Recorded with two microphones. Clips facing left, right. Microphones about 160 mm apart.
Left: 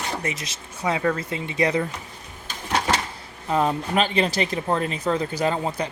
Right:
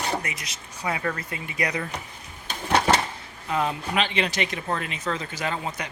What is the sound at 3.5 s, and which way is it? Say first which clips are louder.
Speech: left 4 dB; 35° left (ahead or behind).